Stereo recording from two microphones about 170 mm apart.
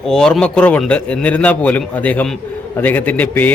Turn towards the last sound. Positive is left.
turn(degrees=10)  # may be behind; listen again after turning